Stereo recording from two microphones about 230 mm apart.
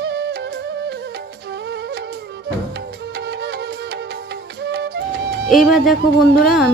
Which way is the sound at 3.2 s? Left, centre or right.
Right.